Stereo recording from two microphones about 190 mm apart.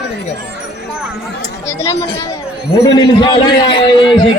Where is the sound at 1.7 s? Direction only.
15° left (ahead or behind).